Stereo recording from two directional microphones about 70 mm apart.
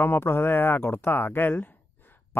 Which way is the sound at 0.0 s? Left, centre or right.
Left.